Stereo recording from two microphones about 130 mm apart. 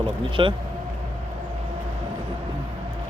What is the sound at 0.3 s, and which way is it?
Speech, 40° right (ahead or behind).